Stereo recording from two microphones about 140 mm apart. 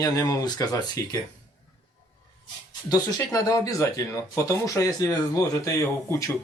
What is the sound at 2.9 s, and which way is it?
Speech, 25° left (ahead or behind).